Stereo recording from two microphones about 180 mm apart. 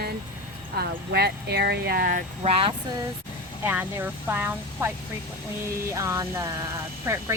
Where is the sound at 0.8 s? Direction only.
60° right (ahead or behind).